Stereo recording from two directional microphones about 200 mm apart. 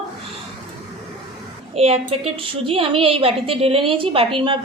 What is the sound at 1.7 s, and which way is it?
A woman's voice, 30° right (ahead or behind).